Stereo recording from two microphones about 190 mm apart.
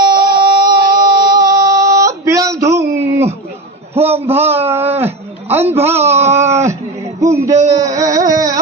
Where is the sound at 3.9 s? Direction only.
30° right (ahead or behind).